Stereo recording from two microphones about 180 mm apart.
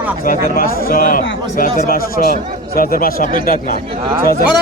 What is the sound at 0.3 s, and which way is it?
A man's voice, 55° left (ahead or behind).